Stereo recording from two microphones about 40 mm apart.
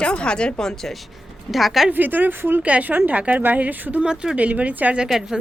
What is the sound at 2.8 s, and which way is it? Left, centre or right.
Speech, right.